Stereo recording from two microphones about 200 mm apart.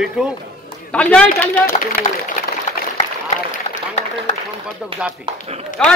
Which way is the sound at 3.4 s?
35° left (ahead or behind).